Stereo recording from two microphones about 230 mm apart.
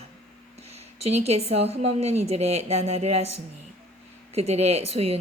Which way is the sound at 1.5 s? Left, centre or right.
Right.